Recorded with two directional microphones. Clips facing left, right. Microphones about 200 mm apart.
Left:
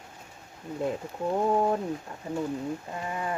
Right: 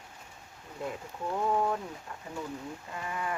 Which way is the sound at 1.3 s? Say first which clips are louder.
Left 4 dB; 30° left (ahead or behind).